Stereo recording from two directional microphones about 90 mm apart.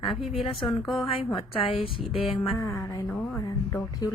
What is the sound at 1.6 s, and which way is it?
Speech, 90° left.